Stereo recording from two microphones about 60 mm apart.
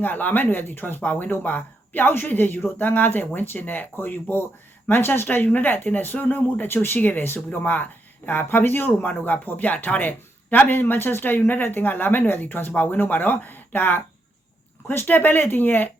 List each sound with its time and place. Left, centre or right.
0.0 s speech: left